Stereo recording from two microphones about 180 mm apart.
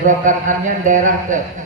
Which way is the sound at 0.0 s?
45° right (ahead or behind).